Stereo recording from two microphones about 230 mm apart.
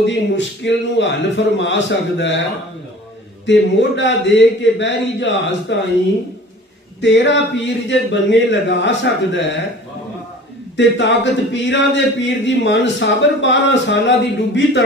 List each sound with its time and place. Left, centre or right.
0.0 s a man's voice: left
3.4 s a man's voice: left
7.0 s a man's voice: left
10.8 s a man's voice: left